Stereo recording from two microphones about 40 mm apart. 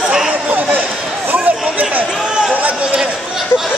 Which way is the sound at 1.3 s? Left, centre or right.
Right.